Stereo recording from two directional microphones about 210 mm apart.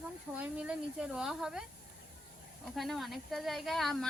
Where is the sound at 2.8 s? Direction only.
Centre (ahead or behind).